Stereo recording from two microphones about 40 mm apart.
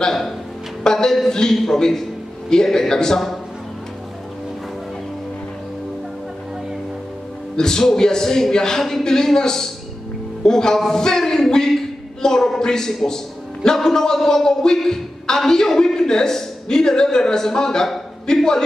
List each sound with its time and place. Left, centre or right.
0.0 s a woman's voice: centre
7.5 s a woman's voice: centre